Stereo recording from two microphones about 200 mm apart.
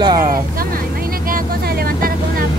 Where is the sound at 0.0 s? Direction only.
20° right (ahead or behind).